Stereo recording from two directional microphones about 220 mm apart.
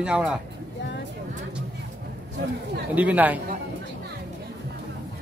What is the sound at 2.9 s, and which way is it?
Speech, 5° right (ahead or behind).